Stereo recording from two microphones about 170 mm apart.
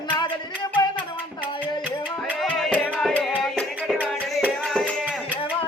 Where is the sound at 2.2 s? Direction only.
Centre (ahead or behind).